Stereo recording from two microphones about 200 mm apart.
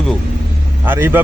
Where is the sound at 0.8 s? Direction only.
10° right (ahead or behind).